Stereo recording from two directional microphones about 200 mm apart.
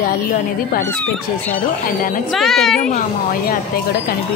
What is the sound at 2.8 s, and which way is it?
Speech, 40° left (ahead or behind).